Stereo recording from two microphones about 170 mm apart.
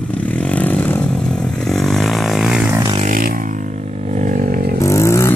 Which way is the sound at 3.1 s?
55° right (ahead or behind).